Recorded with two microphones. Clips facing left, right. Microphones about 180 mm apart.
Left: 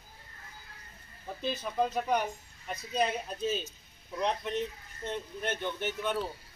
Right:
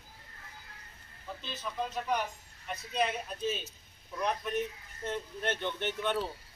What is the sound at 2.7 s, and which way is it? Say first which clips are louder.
Speech: left 2 dB; 35° left (ahead or behind).